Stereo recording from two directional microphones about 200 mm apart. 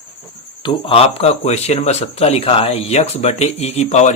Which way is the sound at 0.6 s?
30° left (ahead or behind).